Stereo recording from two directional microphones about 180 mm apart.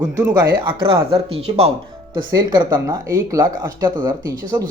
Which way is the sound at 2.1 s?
25° right (ahead or behind).